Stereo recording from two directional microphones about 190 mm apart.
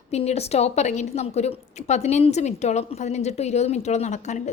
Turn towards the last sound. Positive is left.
turn(degrees=40)  # may be behind; listen again after turning